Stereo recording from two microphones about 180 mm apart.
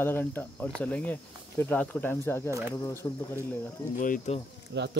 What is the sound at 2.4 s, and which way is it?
Speech, 15° right (ahead or behind).